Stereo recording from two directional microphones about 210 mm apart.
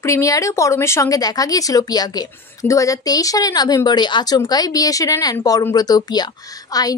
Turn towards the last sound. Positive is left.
turn(degrees=15)  # may be behind; listen again after turning